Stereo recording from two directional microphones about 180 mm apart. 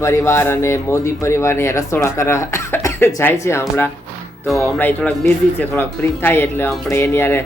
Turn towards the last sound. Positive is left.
turn(degrees=15)  # may be behind; listen again after turning